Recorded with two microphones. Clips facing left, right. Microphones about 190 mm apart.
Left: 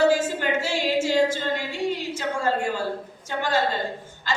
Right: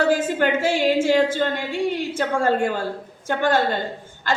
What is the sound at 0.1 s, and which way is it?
A woman's voice, 60° right (ahead or behind).